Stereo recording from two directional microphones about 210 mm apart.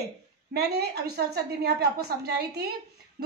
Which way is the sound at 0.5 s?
50° right (ahead or behind).